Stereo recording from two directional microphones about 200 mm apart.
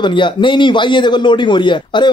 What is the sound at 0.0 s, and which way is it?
A man's voice, 25° left (ahead or behind).